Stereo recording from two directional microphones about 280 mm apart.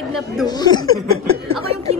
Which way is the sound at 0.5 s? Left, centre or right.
Centre.